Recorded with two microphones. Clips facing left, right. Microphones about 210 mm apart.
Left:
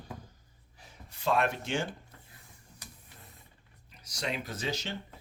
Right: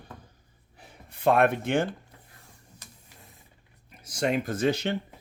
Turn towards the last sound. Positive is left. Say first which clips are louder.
# right 10 dB
turn(degrees=-55)  # may be behind; listen again after turning